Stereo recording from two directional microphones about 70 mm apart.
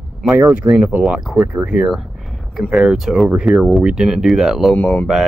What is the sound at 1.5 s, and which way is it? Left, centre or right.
Speech, centre.